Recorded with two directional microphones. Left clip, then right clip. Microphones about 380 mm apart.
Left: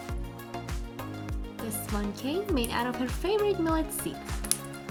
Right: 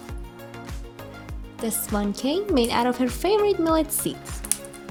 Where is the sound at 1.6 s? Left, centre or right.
Left.